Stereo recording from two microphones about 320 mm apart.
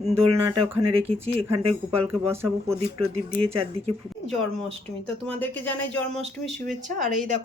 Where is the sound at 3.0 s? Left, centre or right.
Centre.